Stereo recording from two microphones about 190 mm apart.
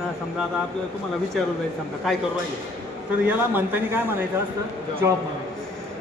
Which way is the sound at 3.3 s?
10° right (ahead or behind).